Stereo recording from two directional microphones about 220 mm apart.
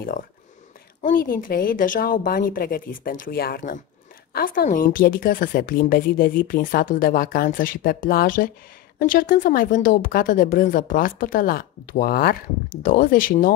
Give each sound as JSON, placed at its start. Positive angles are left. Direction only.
{"t": 0.0, "sound": "a woman's voice", "side_deg": 40}